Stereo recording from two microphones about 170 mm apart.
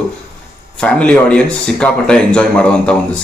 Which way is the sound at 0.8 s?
5° left (ahead or behind).